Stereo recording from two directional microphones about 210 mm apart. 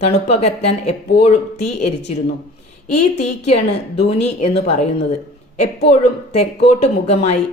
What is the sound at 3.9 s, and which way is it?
Speech, 30° left (ahead or behind).